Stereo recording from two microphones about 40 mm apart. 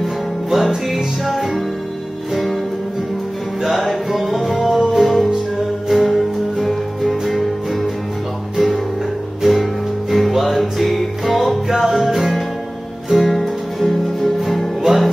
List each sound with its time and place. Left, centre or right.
0.0 s music: centre
3.6 s music: centre
9.4 s music: centre